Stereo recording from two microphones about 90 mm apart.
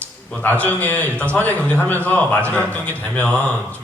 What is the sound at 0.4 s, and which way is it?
A man's voice, 20° left (ahead or behind).